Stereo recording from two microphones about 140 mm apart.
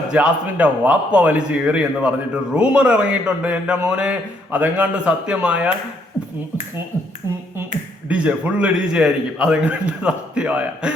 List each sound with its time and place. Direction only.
0.1 s a man's voice: 10° right (ahead or behind)
8.0 s a man's voice: 10° right (ahead or behind)